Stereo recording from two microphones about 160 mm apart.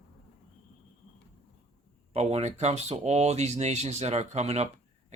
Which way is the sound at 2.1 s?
40° right (ahead or behind).